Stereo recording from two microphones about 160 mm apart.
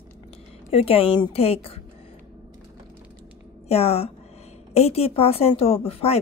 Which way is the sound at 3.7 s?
40° left (ahead or behind).